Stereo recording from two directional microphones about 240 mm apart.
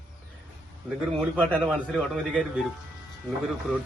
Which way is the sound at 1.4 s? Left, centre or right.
Centre.